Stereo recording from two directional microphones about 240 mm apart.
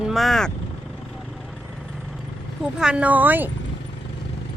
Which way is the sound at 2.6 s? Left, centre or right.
Centre.